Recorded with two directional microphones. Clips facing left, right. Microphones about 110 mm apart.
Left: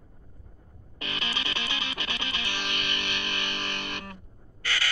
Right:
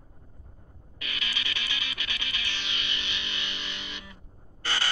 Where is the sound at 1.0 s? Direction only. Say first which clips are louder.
Left 4 dB; 35° left (ahead or behind).